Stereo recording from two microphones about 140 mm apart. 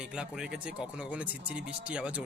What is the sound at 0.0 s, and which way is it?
Speech, 5° right (ahead or behind).